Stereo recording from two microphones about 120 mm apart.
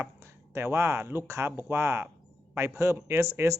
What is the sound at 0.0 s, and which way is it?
Speech, 20° right (ahead or behind).